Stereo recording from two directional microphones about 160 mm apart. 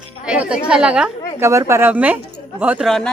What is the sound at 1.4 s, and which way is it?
A woman's voice, 15° right (ahead or behind).